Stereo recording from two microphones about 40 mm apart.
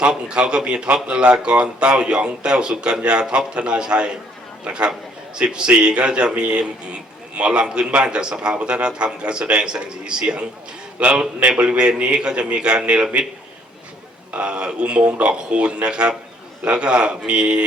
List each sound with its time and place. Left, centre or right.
0.0 s a man's voice: right
14.3 s a man's voice: right